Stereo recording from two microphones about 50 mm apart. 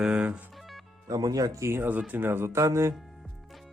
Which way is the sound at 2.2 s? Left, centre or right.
Right.